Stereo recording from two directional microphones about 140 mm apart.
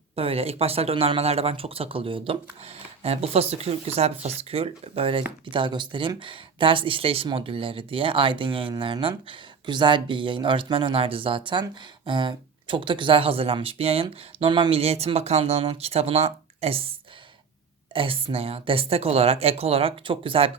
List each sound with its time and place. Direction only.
0.2 s speech: 45° right (ahead or behind)
17.9 s speech: 40° right (ahead or behind)